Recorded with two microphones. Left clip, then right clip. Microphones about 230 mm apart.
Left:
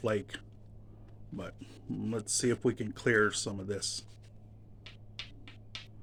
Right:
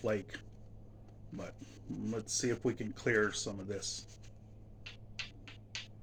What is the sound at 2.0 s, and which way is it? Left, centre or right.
Speech, left.